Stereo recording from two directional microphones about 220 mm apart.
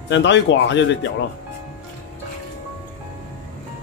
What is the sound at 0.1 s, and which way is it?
Speech, 55° left (ahead or behind).